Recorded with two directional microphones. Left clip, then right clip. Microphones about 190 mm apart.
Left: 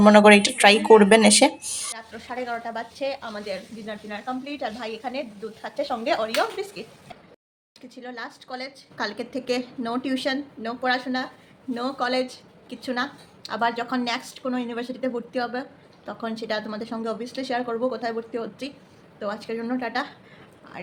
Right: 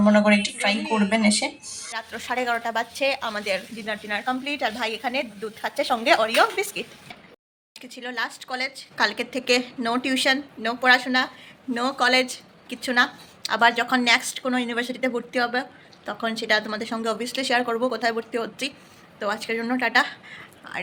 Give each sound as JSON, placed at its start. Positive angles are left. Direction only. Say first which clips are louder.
{"t": 0.0, "sound": "speech", "louder": "left 6 dB", "side_deg": 30}
{"t": 0.9, "sound": "speech", "louder": "left 11 dB", "side_deg": 20}
{"t": 1.1, "sound": "speech", "louder": "left 7 dB", "side_deg": 35}
{"t": 2.0, "sound": "a woman's voice", "louder": "right 6 dB", "side_deg": -10}
{"t": 7.8, "sound": "a woman's voice", "louder": "right 7 dB", "side_deg": 5}